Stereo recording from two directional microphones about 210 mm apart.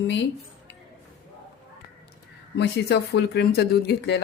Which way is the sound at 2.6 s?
50° left (ahead or behind).